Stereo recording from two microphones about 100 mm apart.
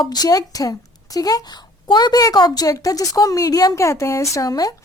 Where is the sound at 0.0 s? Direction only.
40° left (ahead or behind).